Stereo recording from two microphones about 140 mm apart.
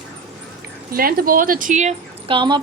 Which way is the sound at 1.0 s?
90° right.